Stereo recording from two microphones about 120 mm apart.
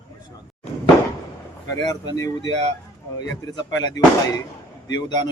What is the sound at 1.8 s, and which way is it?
Speech, 30° left (ahead or behind).